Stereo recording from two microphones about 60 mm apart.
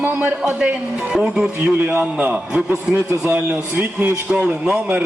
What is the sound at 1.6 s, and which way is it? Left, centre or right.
A man's voice, right.